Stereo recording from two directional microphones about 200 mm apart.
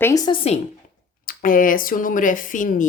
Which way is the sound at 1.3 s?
45° left (ahead or behind).